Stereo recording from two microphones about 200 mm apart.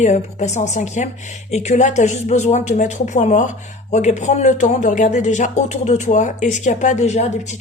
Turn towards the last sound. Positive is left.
turn(degrees=35)  # may be behind; listen again after turning